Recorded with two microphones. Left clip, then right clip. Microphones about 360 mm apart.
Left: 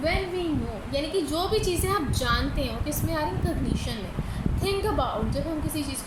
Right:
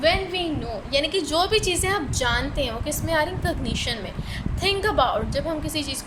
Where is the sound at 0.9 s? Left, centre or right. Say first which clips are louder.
Right 5 dB; right.